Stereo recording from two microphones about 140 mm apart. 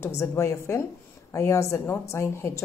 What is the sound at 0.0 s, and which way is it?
Speech, 20° left (ahead or behind).